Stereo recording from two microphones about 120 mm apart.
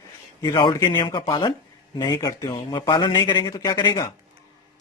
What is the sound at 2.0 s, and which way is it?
Speech, 30° left (ahead or behind).